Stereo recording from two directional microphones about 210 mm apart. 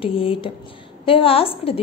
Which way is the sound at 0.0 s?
25° left (ahead or behind).